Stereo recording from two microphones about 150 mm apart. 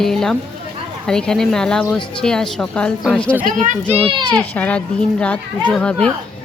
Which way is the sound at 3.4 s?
55° right (ahead or behind).